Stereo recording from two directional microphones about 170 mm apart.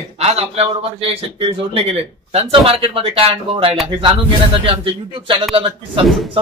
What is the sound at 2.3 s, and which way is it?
Speech, 35° right (ahead or behind).